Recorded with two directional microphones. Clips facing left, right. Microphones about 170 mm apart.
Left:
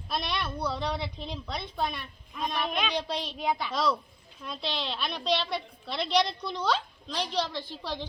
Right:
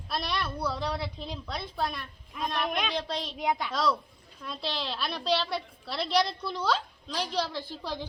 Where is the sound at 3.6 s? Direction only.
Centre (ahead or behind).